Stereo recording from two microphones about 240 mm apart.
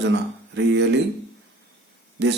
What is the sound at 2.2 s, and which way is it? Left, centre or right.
Speech, right.